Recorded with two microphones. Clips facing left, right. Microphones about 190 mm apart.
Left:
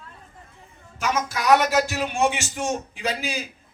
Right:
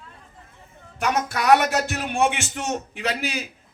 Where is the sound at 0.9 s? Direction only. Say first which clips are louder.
Right 2 dB; 60° right (ahead or behind).